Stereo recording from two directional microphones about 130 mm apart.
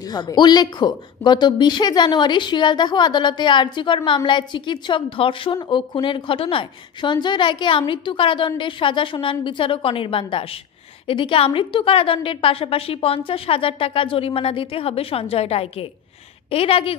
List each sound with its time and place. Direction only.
0.1 s a woman's voice: 35° left (ahead or behind)